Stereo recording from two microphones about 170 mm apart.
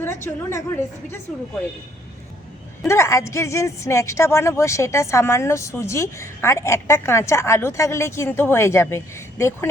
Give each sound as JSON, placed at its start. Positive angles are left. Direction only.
{"t": 0.0, "sound": "a woman's voice", "side_deg": 15}
{"t": 2.8, "sound": "a woman's voice", "side_deg": 15}